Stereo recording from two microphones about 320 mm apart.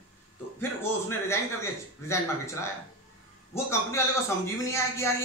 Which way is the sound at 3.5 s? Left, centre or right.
Centre.